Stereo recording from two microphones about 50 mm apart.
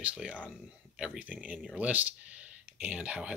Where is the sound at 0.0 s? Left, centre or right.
Right.